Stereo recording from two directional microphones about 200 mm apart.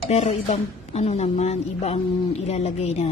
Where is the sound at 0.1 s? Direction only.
30° left (ahead or behind).